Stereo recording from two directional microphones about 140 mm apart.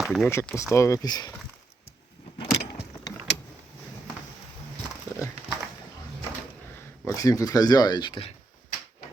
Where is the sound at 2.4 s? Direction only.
45° left (ahead or behind).